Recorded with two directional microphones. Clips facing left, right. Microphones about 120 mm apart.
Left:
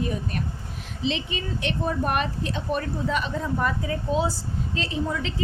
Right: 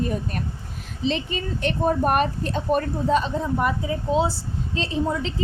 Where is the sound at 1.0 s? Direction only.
40° right (ahead or behind).